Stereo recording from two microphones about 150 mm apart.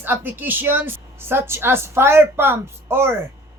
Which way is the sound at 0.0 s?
15° right (ahead or behind).